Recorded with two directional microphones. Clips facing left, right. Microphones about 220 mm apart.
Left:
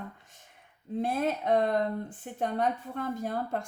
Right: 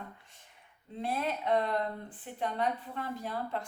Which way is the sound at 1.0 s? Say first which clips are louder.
Left 4 dB; 45° left (ahead or behind).